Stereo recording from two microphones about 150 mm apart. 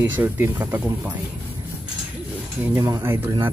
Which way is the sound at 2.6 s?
20° right (ahead or behind).